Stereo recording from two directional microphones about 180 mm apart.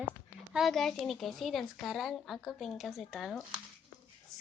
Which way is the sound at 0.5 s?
Centre (ahead or behind).